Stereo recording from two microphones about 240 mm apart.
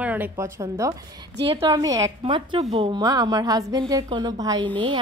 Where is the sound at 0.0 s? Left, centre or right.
Centre.